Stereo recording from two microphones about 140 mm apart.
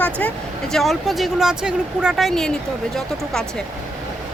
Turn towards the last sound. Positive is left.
turn(degrees=5)  # may be behind; listen again after turning